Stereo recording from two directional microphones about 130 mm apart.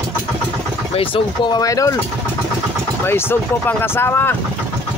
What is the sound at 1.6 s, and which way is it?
Speech, 25° left (ahead or behind).